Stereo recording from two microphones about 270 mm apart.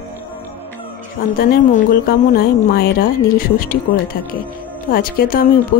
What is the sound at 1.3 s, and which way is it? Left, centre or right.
Speech, left.